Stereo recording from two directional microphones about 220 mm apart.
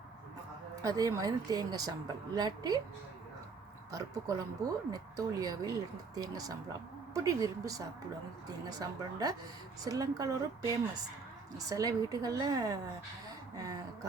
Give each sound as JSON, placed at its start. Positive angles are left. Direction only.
{"t": 0.8, "sound": "speech", "side_deg": -15}
{"t": 3.9, "sound": "speech", "side_deg": -15}